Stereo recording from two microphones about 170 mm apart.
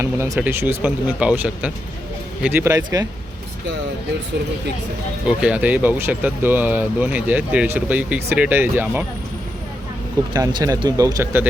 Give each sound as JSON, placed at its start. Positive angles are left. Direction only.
{"t": 0.0, "sound": "speech", "side_deg": -15}
{"t": 5.4, "sound": "speech", "side_deg": -5}
{"t": 10.3, "sound": "speech", "side_deg": -20}